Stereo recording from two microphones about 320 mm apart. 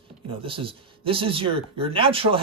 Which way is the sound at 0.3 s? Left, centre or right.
Centre.